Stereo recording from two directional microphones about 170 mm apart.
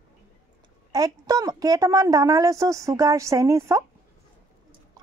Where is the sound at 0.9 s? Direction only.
20° right (ahead or behind).